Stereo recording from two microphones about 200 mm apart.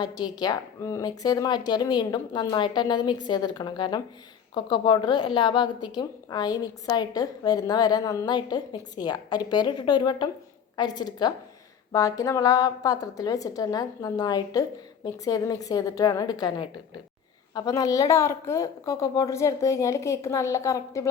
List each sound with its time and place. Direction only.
0.0 s a woman's voice: 20° left (ahead or behind)